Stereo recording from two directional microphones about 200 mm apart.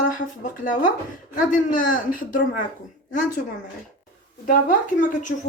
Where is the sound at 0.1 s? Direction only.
40° left (ahead or behind).